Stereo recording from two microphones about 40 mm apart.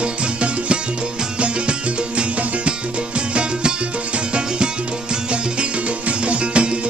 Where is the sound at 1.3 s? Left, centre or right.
Right.